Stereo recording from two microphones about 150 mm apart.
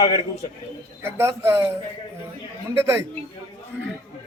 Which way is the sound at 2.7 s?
20° right (ahead or behind).